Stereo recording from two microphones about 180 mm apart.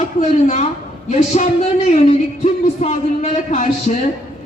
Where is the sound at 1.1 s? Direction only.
40° left (ahead or behind).